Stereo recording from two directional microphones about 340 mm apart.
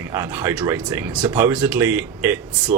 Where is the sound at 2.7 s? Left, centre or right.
Right.